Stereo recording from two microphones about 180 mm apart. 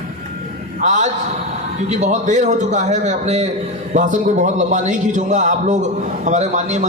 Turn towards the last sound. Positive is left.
turn(degrees=-40)  # may be behind; listen again after turning